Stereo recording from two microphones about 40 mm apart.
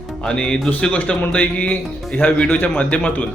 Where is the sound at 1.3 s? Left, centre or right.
Left.